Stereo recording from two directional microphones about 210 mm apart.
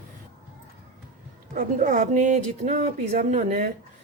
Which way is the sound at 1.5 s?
40° right (ahead or behind).